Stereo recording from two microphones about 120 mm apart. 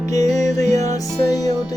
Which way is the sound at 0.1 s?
30° left (ahead or behind).